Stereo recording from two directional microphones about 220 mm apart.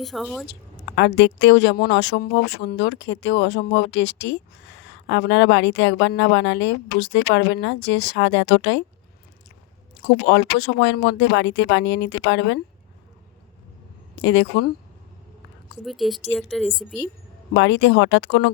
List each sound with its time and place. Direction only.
0.0 s a woman's voice: centre (ahead or behind)
0.9 s a woman's voice: 50° left (ahead or behind)
10.2 s a woman's voice: 55° left (ahead or behind)
14.2 s a woman's voice: 55° left (ahead or behind)
15.8 s a woman's voice: centre (ahead or behind)
17.5 s a woman's voice: 55° left (ahead or behind)